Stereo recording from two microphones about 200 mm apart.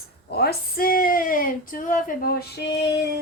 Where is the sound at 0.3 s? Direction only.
50° left (ahead or behind).